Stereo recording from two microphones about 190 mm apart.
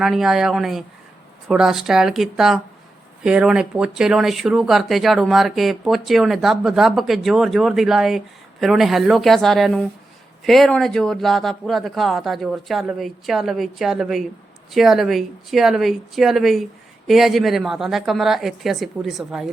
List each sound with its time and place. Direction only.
0.0 s speech: centre (ahead or behind)